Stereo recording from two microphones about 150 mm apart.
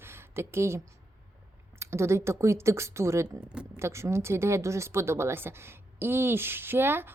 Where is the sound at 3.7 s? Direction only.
20° right (ahead or behind).